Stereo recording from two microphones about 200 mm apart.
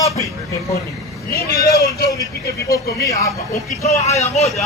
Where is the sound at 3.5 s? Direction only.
35° left (ahead or behind).